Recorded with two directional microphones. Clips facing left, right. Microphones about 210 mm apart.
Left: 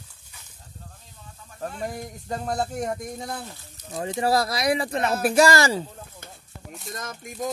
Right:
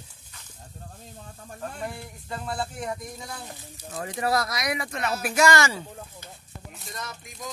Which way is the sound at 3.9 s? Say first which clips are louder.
Left 3 dB; 25° left (ahead or behind).